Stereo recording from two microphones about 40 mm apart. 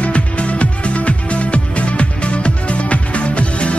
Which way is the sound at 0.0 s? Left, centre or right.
Left.